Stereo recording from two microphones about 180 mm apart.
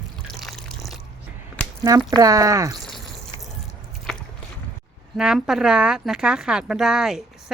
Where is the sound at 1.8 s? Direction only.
20° right (ahead or behind).